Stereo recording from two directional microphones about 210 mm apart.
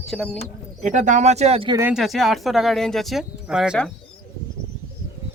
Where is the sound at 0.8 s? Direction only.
35° right (ahead or behind).